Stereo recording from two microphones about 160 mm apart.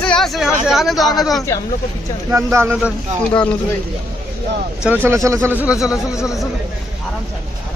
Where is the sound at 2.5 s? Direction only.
20° right (ahead or behind).